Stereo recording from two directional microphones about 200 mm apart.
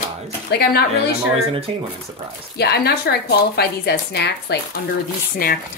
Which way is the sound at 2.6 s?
55° left (ahead or behind).